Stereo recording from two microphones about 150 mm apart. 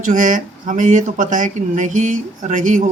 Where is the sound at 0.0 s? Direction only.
60° right (ahead or behind).